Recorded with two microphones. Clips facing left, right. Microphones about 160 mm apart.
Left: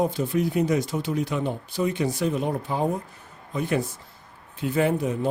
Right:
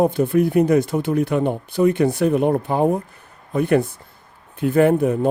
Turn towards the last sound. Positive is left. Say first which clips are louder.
# right 8 dB
turn(degrees=-55)  # may be behind; listen again after turning